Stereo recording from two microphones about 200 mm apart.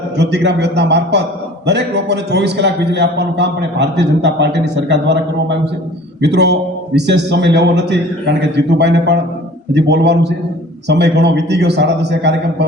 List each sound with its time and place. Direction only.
0.2 s a man's voice: 60° right (ahead or behind)